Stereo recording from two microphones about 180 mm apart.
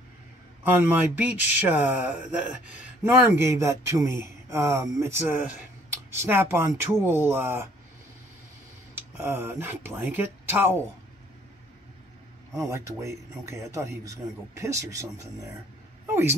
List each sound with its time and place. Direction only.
0.7 s speech: 10° right (ahead or behind)
8.9 s speech: 10° right (ahead or behind)
12.5 s speech: 15° right (ahead or behind)
16.1 s a woman's voice: 15° right (ahead or behind)